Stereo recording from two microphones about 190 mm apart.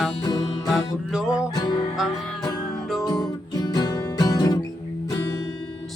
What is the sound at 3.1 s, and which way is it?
Music, 20° left (ahead or behind).